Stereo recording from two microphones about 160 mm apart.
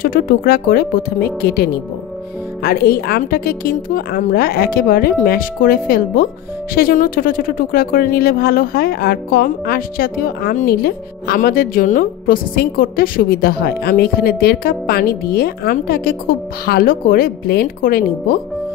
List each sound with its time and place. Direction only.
0.0 s speech: 65° left (ahead or behind)